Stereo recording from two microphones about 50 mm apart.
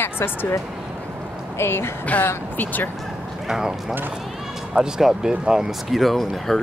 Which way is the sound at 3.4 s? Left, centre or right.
Centre.